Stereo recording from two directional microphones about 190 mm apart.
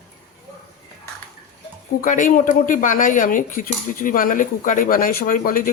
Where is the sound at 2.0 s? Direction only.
45° left (ahead or behind).